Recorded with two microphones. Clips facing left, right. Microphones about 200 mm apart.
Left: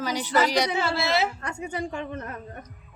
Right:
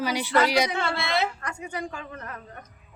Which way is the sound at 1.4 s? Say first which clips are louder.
Left 2 dB; 25° left (ahead or behind).